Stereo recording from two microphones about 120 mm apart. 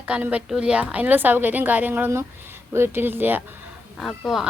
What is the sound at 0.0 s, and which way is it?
A woman's voice, 10° right (ahead or behind).